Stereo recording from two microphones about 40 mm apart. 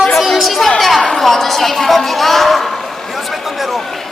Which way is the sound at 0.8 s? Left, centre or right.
Centre.